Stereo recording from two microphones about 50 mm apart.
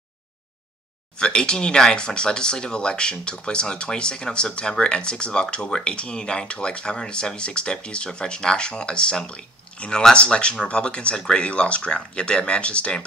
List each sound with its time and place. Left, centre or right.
1.1 s speech: centre